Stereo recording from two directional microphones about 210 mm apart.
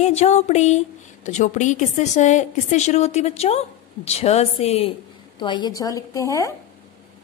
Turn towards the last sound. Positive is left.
turn(degrees=15)  # may be behind; listen again after turning